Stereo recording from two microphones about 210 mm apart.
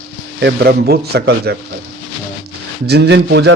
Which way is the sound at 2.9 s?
55° right (ahead or behind).